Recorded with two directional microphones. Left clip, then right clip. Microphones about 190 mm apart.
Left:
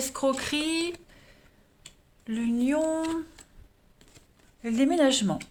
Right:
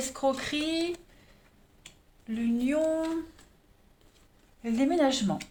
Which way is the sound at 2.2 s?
40° left (ahead or behind).